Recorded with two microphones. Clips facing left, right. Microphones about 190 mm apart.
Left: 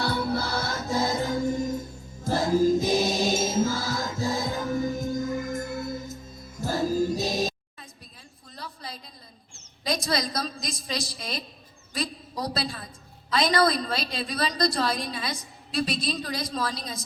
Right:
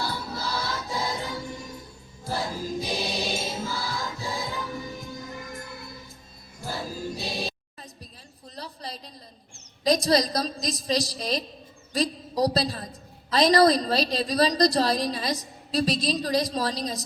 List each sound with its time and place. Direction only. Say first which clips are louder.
0.0 s music: left 5 dB; 65° left (ahead or behind); by 7.5 s 45° left (ahead or behind)
8.5 s a sound: right 2 dB; 35° right (ahead or behind)
9.8 s a woman's voice: right 6 dB; 35° right (ahead or behind)